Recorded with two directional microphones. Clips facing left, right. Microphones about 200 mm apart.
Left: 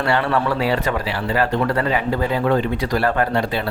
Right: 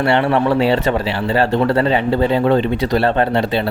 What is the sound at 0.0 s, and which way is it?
Speech, 25° right (ahead or behind).